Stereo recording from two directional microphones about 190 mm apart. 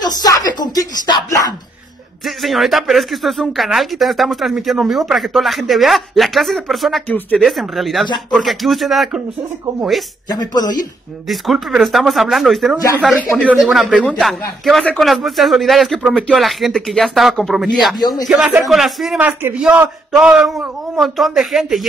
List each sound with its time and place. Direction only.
0.0 s speech: 20° left (ahead or behind)
2.2 s speech: centre (ahead or behind)
10.5 s speech: 20° left (ahead or behind)
11.2 s speech: centre (ahead or behind)
18.0 s speech: 20° left (ahead or behind)
18.3 s speech: centre (ahead or behind)